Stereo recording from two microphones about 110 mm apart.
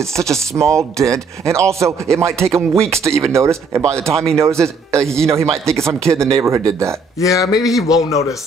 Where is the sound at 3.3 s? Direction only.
25° right (ahead or behind).